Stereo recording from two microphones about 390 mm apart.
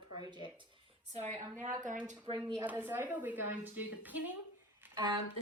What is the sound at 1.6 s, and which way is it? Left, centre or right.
A woman's voice, centre.